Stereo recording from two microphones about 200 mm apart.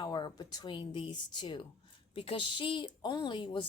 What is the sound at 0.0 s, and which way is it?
A woman's voice, 20° left (ahead or behind).